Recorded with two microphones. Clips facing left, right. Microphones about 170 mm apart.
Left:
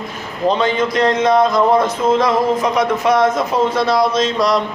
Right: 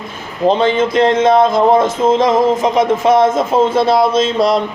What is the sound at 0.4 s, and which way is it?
A man's voice, 25° right (ahead or behind).